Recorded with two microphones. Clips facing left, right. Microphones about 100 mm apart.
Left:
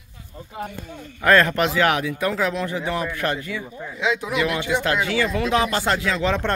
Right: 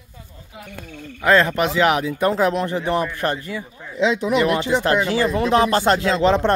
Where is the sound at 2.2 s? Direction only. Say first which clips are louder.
Right 6 dB; 35° right (ahead or behind).